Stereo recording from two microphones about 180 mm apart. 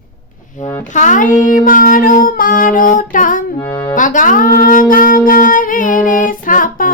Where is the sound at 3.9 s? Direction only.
45° left (ahead or behind).